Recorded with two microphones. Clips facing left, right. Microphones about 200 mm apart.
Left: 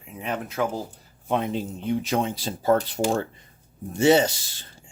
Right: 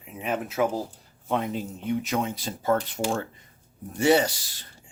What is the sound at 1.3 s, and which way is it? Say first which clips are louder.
Speech: left 2 dB; 20° left (ahead or behind).